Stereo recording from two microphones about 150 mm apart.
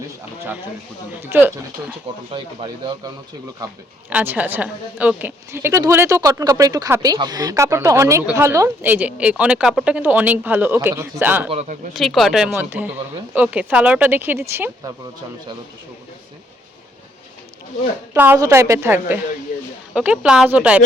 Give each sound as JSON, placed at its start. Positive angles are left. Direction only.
{"t": 1.3, "sound": "speech", "side_deg": -15}
{"t": 2.3, "sound": "a woman's voice", "side_deg": -30}
{"t": 4.1, "sound": "a woman's voice", "side_deg": -10}
{"t": 11.9, "sound": "speech", "side_deg": 0}
{"t": 18.1, "sound": "speech", "side_deg": -15}